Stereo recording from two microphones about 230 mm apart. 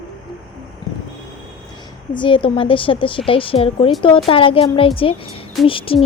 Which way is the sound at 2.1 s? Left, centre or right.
Left.